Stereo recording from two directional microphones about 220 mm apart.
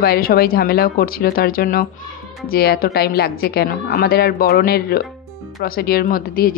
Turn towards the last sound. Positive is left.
turn(degrees=40)  # may be behind; listen again after turning